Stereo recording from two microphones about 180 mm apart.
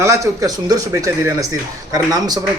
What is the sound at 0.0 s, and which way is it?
Speech, 15° right (ahead or behind).